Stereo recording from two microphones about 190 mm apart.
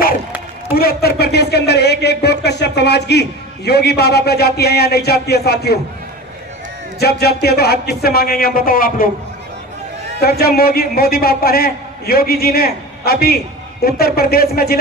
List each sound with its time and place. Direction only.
0.7 s speech: 55° left (ahead or behind)
7.0 s a man's voice: 55° left (ahead or behind)
10.2 s a man's voice: 55° left (ahead or behind)